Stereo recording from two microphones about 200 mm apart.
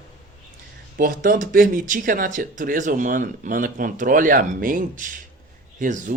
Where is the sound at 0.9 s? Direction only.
45° right (ahead or behind).